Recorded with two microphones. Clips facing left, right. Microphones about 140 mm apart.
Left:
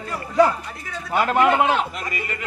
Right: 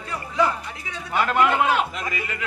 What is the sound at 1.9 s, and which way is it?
Speech, centre (ahead or behind).